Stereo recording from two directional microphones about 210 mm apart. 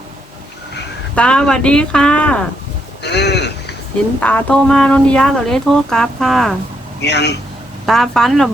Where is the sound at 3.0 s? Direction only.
55° left (ahead or behind).